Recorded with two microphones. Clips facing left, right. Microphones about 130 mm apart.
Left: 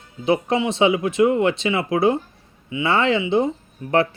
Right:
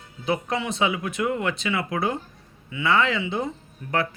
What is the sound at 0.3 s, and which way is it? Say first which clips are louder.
Speech: left 6 dB; 25° left (ahead or behind).